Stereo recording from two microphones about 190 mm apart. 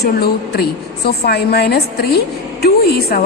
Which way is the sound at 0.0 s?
55° left (ahead or behind).